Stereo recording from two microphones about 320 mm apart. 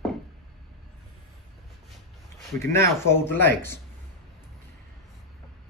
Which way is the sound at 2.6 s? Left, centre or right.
Centre.